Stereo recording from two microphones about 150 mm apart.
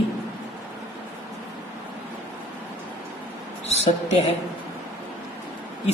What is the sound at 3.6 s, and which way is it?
Speech, 45° left (ahead or behind).